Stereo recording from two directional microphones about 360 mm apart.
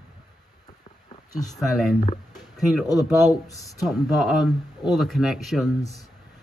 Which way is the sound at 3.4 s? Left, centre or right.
Centre.